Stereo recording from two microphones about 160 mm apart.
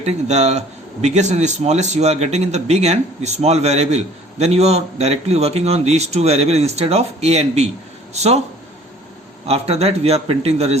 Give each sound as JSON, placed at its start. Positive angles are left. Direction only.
{"t": 0.0, "sound": "speech", "side_deg": -45}
{"t": 9.5, "sound": "a man's voice", "side_deg": -40}